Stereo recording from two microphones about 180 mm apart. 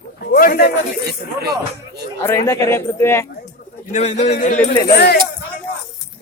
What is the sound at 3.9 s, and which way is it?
Speech, 40° left (ahead or behind).